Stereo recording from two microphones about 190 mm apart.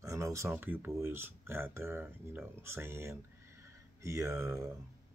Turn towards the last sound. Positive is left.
turn(degrees=-15)  # may be behind; listen again after turning